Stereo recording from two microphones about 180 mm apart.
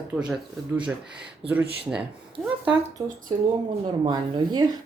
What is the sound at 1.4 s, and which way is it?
A woman's voice, 5° right (ahead or behind).